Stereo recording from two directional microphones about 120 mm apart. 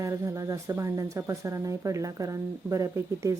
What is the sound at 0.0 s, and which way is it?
Speech, 25° right (ahead or behind).